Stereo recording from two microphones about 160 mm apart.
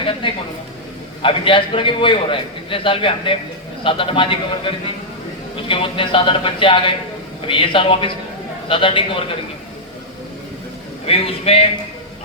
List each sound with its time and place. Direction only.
0.2 s a sound: 30° left (ahead or behind)
1.2 s a man's voice: 30° left (ahead or behind)
11.0 s a man's voice: 40° left (ahead or behind)